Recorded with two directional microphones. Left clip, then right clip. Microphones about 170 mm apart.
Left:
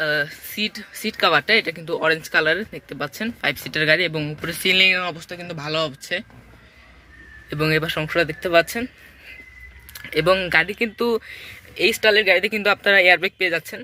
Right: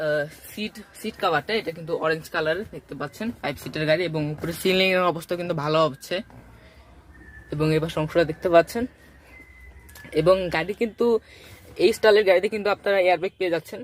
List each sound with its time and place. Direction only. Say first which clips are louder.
0.0 s speech: left 3 dB; 5° right (ahead or behind)
4.6 s speech: left 3 dB; 30° right (ahead or behind)
7.5 s speech: left 3 dB; centre (ahead or behind)
10.1 s speech: left 2 dB; 5° right (ahead or behind)
13.5 s speech: left 2 dB; 15° right (ahead or behind)